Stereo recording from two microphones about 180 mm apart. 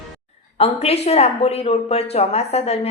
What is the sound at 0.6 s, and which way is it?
A woman's voice, 35° left (ahead or behind).